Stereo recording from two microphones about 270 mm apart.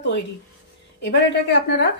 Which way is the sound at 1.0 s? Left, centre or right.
Left.